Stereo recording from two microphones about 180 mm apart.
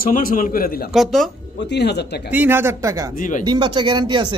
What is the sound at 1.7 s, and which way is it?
Speech, 70° left (ahead or behind).